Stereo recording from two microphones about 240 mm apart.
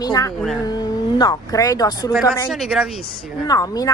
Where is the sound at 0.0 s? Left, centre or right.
Centre.